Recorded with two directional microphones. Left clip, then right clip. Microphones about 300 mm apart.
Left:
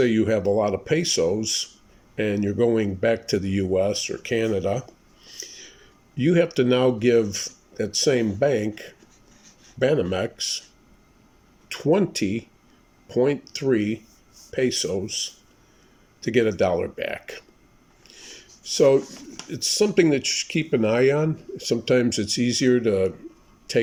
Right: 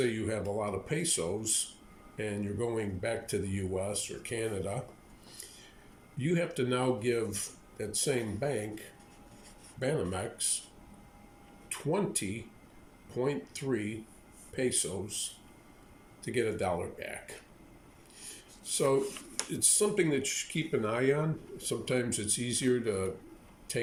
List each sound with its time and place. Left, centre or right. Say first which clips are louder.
0.0 s speech: left 12 dB; left
6.1 s speech: left 12 dB; left
11.7 s speech: left 11 dB; left
18.6 s speech: left 11 dB; left